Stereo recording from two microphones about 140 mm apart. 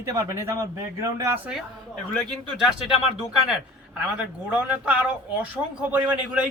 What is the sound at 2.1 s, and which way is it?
Speech, centre (ahead or behind).